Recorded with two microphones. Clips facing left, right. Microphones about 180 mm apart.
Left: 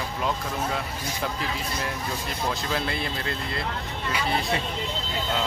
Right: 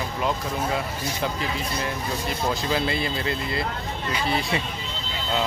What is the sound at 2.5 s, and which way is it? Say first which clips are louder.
Speech: right 4 dB; centre (ahead or behind).